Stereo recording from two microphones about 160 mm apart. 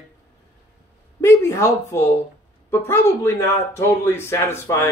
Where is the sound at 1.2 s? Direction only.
20° left (ahead or behind).